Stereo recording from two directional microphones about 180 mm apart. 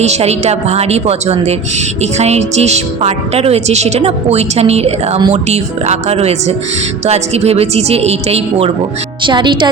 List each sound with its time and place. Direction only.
0.0 s speech: 35° right (ahead or behind)